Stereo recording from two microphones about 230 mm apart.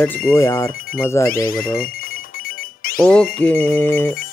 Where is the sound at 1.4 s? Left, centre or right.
Left.